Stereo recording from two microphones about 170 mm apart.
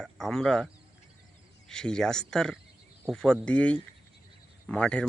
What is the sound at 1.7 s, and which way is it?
Speech, 5° left (ahead or behind).